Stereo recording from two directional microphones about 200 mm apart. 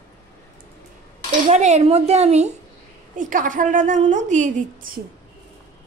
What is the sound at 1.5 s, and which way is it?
A woman's voice, 35° right (ahead or behind).